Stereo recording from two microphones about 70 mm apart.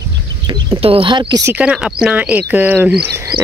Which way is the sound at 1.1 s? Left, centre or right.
Right.